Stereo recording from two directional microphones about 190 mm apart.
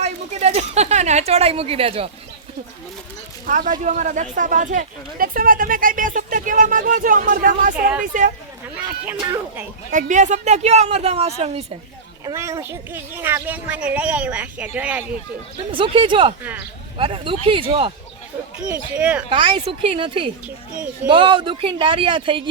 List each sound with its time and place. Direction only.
0.0 s a woman's voice: 35° right (ahead or behind)
3.4 s speech: 45° right (ahead or behind)
9.2 s speech: 15° right (ahead or behind)
9.9 s a woman's voice: 40° right (ahead or behind)
12.2 s speech: 15° right (ahead or behind)
15.7 s speech: 25° right (ahead or behind)
16.4 s speech: 10° right (ahead or behind)
17.0 s speech: 30° right (ahead or behind)
18.7 s speech: 5° right (ahead or behind)
19.3 s speech: 25° right (ahead or behind)